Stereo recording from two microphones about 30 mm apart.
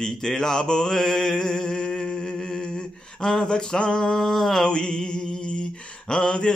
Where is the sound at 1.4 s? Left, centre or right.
Left.